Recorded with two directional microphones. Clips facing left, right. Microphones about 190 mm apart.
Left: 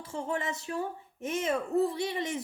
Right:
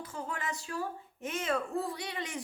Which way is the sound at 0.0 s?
25° left (ahead or behind).